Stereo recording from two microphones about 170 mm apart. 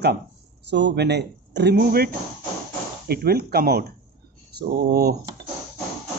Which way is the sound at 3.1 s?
65° right (ahead or behind).